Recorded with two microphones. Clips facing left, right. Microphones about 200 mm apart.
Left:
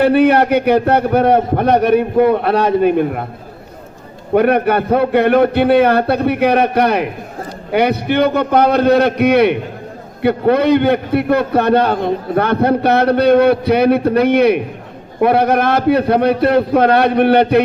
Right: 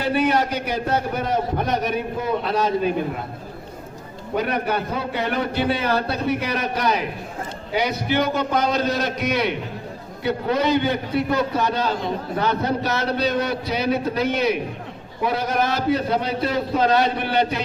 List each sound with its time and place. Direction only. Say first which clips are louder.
0.0 s a man's voice: left 9 dB; 60° left (ahead or behind)
4.4 s a man's voice: left 10 dB; 60° left (ahead or behind)